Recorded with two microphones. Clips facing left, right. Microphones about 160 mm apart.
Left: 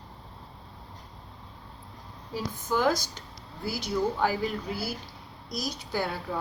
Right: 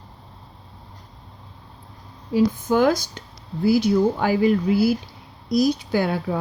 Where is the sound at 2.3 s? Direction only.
65° right (ahead or behind).